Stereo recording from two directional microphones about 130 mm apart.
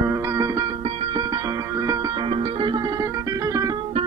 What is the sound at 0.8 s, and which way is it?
Music, 50° right (ahead or behind).